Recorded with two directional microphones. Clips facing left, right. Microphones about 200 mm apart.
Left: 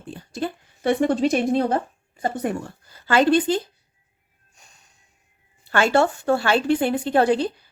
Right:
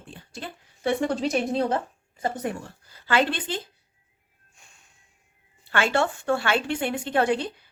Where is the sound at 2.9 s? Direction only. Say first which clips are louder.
Left 7 dB; 45° left (ahead or behind).